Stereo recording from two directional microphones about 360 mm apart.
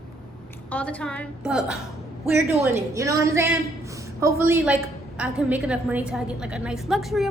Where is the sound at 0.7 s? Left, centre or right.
Centre.